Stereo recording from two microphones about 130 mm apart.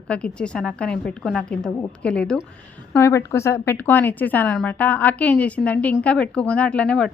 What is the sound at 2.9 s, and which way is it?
A woman's voice, 20° left (ahead or behind).